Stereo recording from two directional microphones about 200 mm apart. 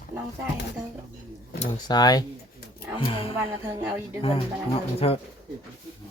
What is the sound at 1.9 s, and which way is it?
Speech, 20° left (ahead or behind).